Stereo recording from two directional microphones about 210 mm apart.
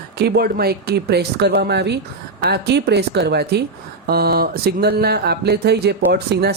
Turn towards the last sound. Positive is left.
turn(degrees=-50)  # may be behind; listen again after turning